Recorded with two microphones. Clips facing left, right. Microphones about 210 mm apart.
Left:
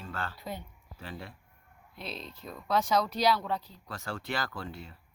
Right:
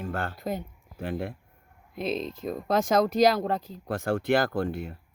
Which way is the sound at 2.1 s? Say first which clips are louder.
Right 12 dB; 90° right.